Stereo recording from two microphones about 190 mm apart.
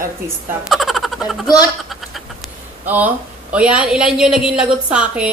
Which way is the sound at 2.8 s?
10° right (ahead or behind).